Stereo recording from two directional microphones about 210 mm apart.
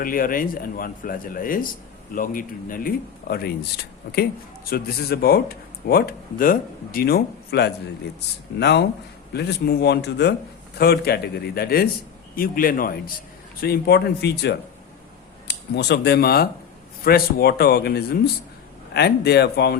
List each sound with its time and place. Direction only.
0.0 s speech: 40° left (ahead or behind)